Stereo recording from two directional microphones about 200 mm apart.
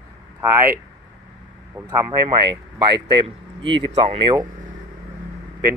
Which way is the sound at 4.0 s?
25° right (ahead or behind).